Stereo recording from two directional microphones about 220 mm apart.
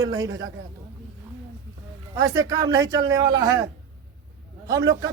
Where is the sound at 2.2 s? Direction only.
15° right (ahead or behind).